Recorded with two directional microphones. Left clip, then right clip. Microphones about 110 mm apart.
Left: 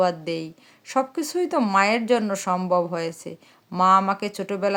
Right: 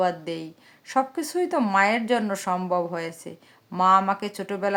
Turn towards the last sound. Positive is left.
turn(degrees=30)  # may be behind; listen again after turning